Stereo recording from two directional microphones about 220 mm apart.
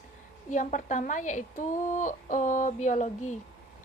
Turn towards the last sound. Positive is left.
turn(degrees=35)  # may be behind; listen again after turning